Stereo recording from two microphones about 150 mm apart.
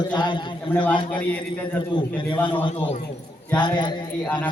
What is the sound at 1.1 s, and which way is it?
Speech, 10° left (ahead or behind).